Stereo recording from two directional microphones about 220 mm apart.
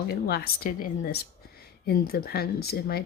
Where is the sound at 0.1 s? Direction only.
45° left (ahead or behind).